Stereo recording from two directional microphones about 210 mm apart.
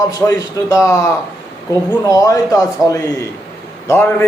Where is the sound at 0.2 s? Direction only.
15° left (ahead or behind).